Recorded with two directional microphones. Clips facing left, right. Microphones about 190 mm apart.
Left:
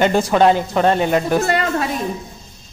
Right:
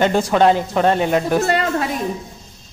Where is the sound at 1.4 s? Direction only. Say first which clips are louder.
Even; 30° right (ahead or behind).